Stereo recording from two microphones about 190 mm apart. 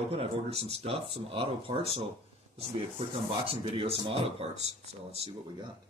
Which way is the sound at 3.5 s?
25° right (ahead or behind).